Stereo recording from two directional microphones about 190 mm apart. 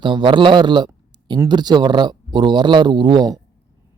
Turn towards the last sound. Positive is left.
turn(degrees=-20)  # may be behind; listen again after turning